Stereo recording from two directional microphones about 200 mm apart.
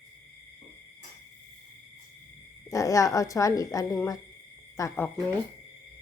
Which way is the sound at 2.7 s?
15° left (ahead or behind).